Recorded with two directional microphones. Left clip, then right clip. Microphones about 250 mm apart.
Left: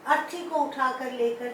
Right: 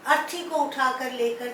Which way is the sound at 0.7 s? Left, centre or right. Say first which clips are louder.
Right 2 dB; centre.